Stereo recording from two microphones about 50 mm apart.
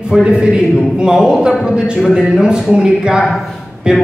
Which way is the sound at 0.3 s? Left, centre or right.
Centre.